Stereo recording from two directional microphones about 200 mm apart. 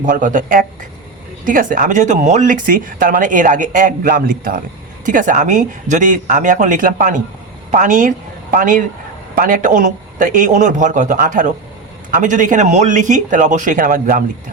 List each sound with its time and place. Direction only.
0.0 s speech: 40° right (ahead or behind)